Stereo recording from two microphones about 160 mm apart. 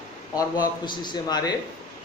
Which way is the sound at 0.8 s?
25° left (ahead or behind).